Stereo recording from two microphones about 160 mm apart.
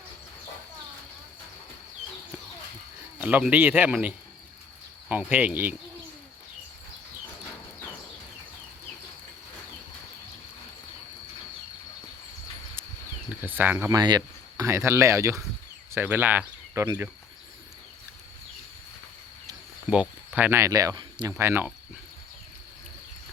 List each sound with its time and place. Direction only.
3.2 s speech: 10° right (ahead or behind)
13.4 s speech: 15° right (ahead or behind)
19.9 s speech: 10° right (ahead or behind); by 21.3 s 30° right (ahead or behind)
21.3 s speech: 15° right (ahead or behind)